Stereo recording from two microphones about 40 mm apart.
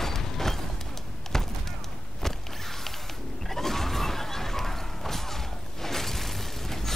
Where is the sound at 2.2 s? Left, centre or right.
Centre.